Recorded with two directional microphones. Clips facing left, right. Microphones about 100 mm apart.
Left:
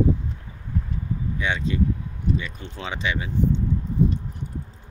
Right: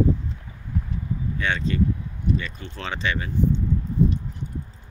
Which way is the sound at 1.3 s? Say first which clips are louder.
Right 1 dB; 10° left (ahead or behind).